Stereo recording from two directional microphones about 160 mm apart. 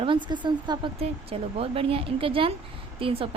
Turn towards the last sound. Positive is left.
turn(degrees=-35)  # may be behind; listen again after turning